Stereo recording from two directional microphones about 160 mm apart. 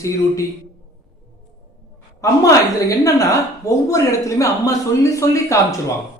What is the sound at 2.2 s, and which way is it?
Speech, 20° left (ahead or behind).